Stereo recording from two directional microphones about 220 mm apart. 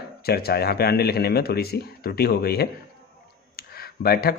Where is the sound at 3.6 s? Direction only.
45° left (ahead or behind).